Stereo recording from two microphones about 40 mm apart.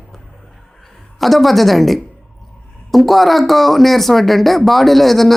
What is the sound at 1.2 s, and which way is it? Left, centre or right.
Speech, centre.